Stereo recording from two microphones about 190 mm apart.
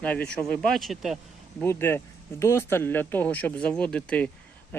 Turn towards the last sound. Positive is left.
turn(degrees=5)  # may be behind; listen again after turning